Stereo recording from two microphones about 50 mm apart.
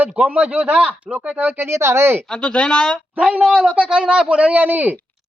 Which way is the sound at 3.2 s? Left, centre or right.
Right.